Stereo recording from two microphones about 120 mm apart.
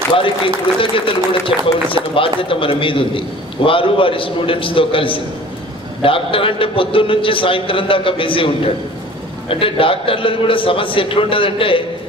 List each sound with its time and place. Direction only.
0.1 s a man's voice: 45° left (ahead or behind)